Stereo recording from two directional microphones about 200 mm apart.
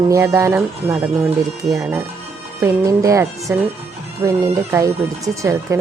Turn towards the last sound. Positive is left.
turn(degrees=-15)  # may be behind; listen again after turning